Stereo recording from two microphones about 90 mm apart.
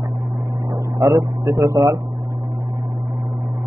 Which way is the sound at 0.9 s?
40° right (ahead or behind).